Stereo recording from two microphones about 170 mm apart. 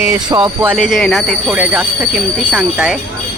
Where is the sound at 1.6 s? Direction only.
10° right (ahead or behind).